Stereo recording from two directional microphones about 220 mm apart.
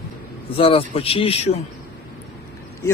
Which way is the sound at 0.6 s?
25° left (ahead or behind).